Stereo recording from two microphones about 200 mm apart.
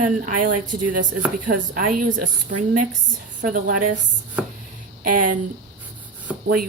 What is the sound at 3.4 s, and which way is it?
Speech, 40° right (ahead or behind).